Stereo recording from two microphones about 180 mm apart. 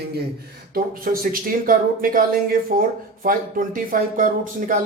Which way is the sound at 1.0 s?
50° right (ahead or behind).